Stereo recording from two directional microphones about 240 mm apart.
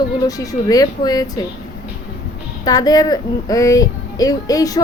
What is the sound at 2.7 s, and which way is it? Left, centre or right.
Speech, centre.